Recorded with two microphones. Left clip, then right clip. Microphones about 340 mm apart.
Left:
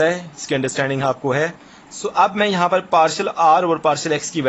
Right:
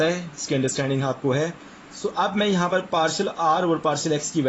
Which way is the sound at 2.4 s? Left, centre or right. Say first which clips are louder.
Left 5 dB; left.